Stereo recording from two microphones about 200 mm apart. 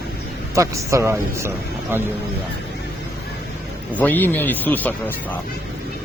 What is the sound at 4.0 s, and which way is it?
Speech, 10° left (ahead or behind).